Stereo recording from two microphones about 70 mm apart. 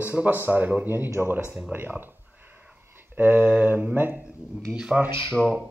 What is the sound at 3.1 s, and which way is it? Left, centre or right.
Speech, right.